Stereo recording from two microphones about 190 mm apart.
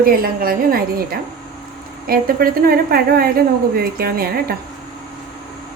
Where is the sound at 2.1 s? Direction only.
50° right (ahead or behind).